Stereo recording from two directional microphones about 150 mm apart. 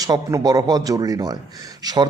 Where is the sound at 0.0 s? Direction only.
20° right (ahead or behind).